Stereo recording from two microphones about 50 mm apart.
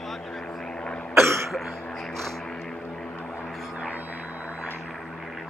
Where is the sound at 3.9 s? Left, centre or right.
Right.